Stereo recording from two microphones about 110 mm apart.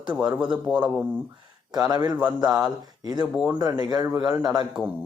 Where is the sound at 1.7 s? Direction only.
35° right (ahead or behind).